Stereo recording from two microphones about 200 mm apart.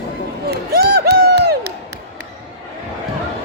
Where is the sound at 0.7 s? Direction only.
50° right (ahead or behind).